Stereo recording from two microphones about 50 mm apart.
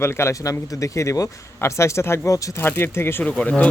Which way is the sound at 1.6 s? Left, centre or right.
Left.